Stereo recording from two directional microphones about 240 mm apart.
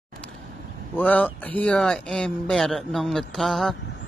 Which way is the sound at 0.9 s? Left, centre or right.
Centre.